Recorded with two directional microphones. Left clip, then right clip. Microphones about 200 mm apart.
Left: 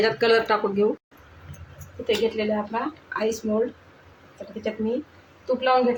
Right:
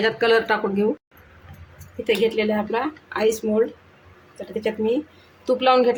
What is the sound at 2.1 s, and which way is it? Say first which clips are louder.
A woman's voice: right 3 dB; 35° right (ahead or behind).